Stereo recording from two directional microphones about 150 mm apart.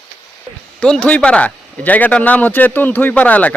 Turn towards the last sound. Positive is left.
turn(degrees=10)  # may be behind; listen again after turning